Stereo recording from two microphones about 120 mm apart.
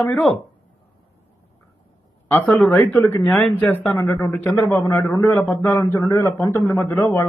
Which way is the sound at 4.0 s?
25° left (ahead or behind).